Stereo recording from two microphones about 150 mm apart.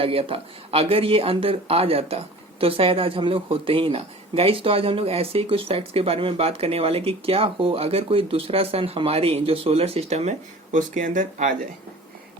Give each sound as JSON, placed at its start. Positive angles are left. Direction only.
{"t": 0.0, "sound": "speech", "side_deg": -40}